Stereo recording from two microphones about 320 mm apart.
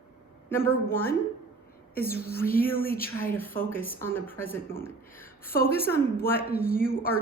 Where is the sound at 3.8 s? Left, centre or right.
Left.